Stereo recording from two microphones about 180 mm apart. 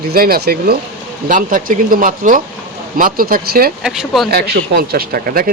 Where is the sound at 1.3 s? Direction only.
50° right (ahead or behind).